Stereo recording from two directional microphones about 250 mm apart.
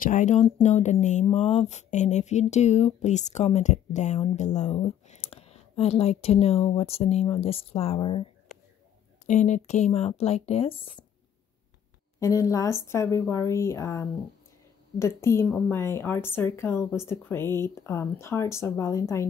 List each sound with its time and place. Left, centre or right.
0.0 s speech: left
12.2 s a woman's voice: centre